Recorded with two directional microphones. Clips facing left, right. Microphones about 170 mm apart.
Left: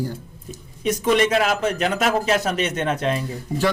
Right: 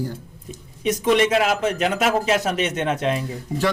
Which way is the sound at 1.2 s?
20° right (ahead or behind).